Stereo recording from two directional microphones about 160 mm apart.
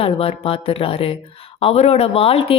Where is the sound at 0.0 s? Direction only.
35° left (ahead or behind).